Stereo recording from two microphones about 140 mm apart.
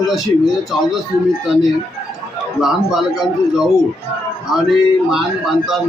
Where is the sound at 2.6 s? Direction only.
Centre (ahead or behind).